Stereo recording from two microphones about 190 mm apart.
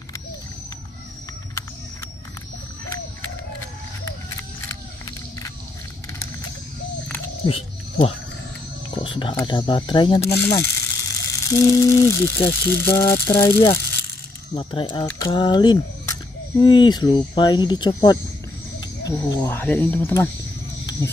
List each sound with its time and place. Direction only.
7.4 s frog: 30° left (ahead or behind)
8.9 s speech: 25° left (ahead or behind)
10.2 s speech: 15° left (ahead or behind)